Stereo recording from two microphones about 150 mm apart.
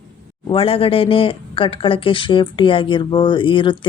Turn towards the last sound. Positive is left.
turn(degrees=35)  # may be behind; listen again after turning